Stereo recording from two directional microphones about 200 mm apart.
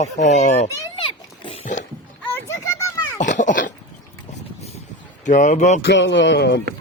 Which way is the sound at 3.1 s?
40° left (ahead or behind).